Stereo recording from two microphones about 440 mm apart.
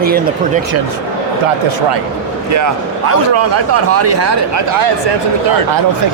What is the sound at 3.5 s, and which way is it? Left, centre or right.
Speech, right.